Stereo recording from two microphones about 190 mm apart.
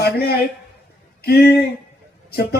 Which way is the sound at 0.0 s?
55° left (ahead or behind).